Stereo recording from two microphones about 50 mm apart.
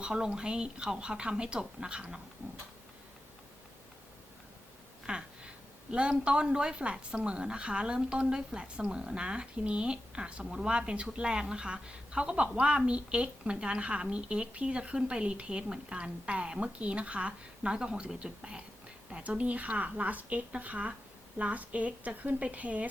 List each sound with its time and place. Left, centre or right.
0.0 s a woman's voice: centre
5.0 s a sound: centre
5.9 s a woman's voice: right